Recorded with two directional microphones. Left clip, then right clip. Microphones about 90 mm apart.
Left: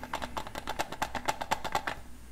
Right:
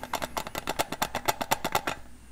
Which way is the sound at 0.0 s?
35° right (ahead or behind).